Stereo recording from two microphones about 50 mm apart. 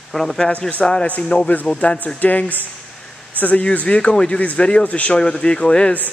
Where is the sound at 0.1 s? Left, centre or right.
Centre.